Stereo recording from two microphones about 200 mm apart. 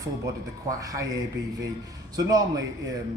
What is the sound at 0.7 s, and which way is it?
Speech, 15° right (ahead or behind).